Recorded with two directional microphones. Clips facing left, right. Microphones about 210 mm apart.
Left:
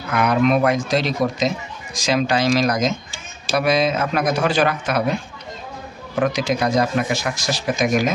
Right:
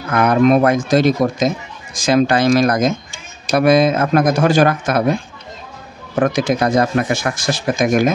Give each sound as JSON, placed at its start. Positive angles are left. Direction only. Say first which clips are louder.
{"t": 0.1, "sound": "speech", "louder": "right 5 dB", "side_deg": -45}
{"t": 6.1, "sound": "speech", "louder": "right 4 dB", "side_deg": -50}